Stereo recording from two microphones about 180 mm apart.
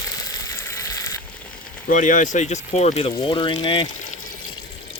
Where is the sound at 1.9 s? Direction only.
45° left (ahead or behind); by 3.9 s 25° left (ahead or behind).